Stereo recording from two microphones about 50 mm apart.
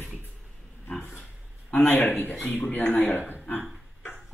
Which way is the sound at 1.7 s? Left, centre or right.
Left.